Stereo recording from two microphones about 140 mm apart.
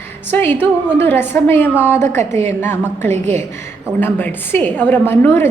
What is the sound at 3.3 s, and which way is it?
A woman's voice, 15° left (ahead or behind).